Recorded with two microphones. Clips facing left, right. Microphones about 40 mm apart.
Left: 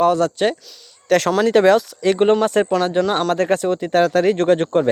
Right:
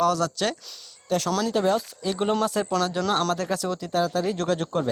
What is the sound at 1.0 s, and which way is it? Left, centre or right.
Speech, left.